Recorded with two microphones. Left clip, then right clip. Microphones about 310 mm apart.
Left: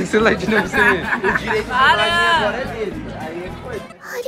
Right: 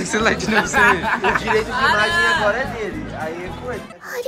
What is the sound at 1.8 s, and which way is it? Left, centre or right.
Speech, centre.